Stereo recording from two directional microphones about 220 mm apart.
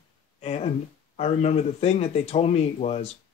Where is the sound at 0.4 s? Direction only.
30° left (ahead or behind).